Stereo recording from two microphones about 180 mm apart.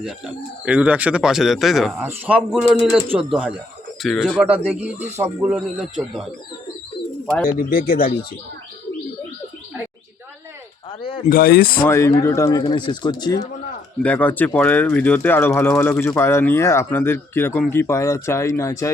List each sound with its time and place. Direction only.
0.0 s speech: 5° right (ahead or behind)
7.4 s speech: 55° left (ahead or behind)
11.3 s speech: 55° left (ahead or behind)
11.9 s speech: 15° left (ahead or behind)
14.0 s speech: 10° left (ahead or behind)